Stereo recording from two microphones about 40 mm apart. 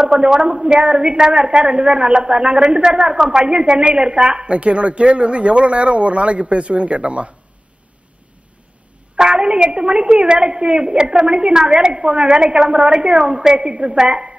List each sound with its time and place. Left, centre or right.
0.0 s a woman's voice: centre
9.1 s a woman's voice: right